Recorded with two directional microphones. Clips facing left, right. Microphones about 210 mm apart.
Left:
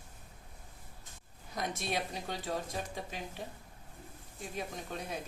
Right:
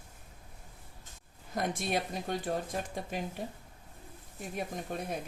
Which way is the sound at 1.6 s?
55° right (ahead or behind).